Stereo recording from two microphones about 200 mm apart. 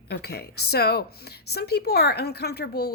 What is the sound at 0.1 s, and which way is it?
A woman's voice, 55° left (ahead or behind).